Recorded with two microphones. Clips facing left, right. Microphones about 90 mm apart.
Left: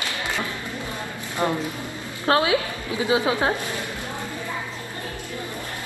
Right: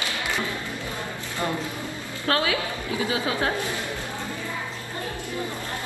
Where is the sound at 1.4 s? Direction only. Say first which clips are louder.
Left 4 dB; 25° left (ahead or behind).